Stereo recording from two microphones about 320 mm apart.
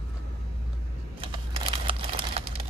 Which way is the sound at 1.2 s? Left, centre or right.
Centre.